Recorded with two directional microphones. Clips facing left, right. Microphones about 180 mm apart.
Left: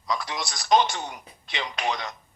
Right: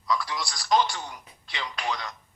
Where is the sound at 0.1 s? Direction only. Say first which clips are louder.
Right 1 dB; 20° left (ahead or behind).